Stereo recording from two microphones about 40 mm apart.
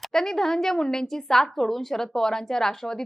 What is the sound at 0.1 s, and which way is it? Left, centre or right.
A woman's voice, centre.